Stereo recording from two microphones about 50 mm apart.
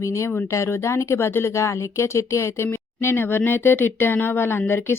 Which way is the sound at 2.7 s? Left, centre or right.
Left.